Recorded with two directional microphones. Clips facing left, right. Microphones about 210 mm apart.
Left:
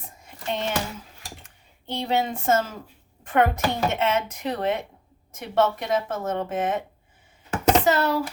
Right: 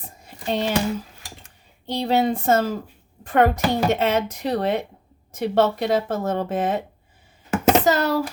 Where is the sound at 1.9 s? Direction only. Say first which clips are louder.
Right 5 dB; 35° right (ahead or behind).